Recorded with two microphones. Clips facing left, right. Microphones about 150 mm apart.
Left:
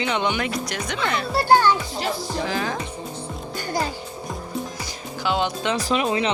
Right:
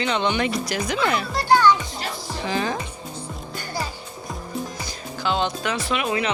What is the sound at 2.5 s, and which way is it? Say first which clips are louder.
Speech: right 5 dB; centre (ahead or behind).